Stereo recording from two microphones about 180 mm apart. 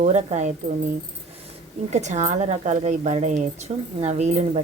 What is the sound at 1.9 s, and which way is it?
A woman's voice, 40° right (ahead or behind).